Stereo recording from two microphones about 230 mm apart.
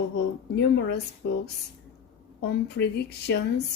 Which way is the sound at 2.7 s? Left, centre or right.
Left.